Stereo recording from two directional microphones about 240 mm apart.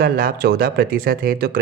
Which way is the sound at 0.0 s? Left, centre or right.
Right.